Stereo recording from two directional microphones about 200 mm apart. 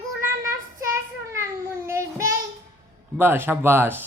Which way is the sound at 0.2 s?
15° right (ahead or behind).